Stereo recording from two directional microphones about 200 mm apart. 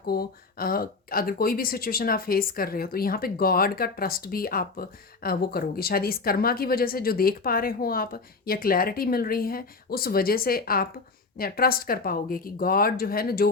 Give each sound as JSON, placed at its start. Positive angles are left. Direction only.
{"t": 0.0, "sound": "speech", "side_deg": 50}